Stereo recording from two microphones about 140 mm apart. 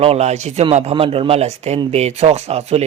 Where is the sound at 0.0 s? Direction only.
50° right (ahead or behind).